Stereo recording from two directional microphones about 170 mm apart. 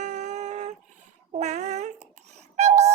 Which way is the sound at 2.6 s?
40° right (ahead or behind).